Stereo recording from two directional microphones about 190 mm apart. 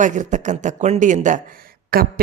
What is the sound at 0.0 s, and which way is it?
Speech, 40° right (ahead or behind).